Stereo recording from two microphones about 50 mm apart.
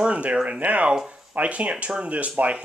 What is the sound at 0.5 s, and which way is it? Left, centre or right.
Speech, right.